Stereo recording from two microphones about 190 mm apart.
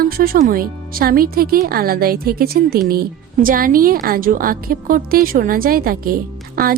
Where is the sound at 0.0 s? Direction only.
50° right (ahead or behind).